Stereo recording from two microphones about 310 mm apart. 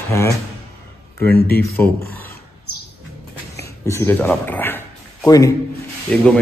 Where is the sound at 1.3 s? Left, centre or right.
Left.